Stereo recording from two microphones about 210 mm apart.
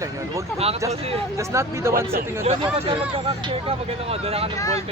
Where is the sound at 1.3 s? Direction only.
15° right (ahead or behind).